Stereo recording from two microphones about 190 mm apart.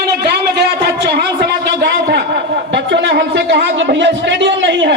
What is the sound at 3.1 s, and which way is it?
A man's voice, 65° right (ahead or behind).